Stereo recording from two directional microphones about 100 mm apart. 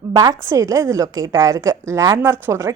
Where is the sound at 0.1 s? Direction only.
40° right (ahead or behind).